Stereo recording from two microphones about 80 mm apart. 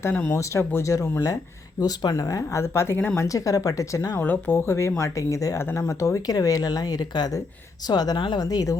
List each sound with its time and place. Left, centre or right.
0.1 s speech: left
0.7 s speech: left
1.8 s speech: left
3.2 s speech: left
4.2 s speech: left
8.4 s speech: left